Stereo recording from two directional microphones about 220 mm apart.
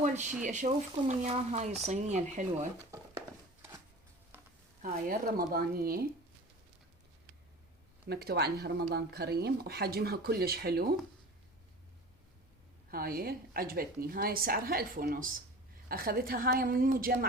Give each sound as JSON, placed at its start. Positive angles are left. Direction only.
{"t": 0.0, "sound": "a woman's voice", "side_deg": -35}
{"t": 4.8, "sound": "speech", "side_deg": -40}
{"t": 8.0, "sound": "speech", "side_deg": -45}
{"t": 12.9, "sound": "a woman's voice", "side_deg": -40}